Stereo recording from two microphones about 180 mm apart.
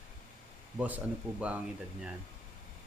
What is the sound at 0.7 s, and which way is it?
Speech, 10° right (ahead or behind).